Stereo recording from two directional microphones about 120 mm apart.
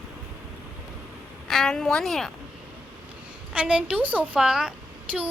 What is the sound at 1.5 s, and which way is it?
Speech, 5° left (ahead or behind).